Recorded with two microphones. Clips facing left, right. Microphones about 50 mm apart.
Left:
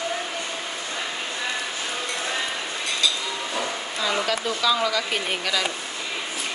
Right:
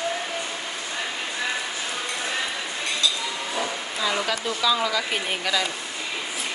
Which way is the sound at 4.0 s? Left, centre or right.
Centre.